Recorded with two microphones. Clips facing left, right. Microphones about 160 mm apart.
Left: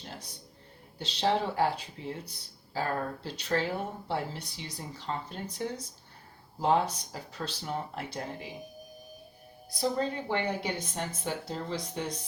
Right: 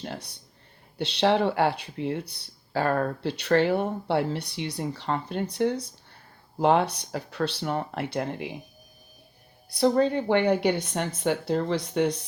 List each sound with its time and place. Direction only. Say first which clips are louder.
0.0 s speech: right 8 dB; 70° right (ahead or behind)
9.7 s speech: right 9 dB; 65° right (ahead or behind)